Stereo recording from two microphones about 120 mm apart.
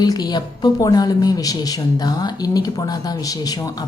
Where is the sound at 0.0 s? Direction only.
35° left (ahead or behind).